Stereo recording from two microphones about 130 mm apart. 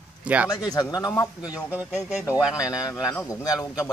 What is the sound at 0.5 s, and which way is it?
Speech, 30° left (ahead or behind).